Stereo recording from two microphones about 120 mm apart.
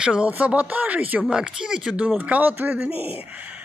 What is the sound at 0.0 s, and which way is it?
Speech, 10° right (ahead or behind).